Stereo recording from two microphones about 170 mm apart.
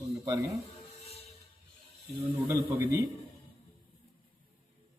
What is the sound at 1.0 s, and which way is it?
Music, 40° left (ahead or behind).